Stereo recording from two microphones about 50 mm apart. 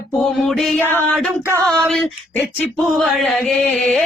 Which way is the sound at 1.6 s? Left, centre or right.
Centre.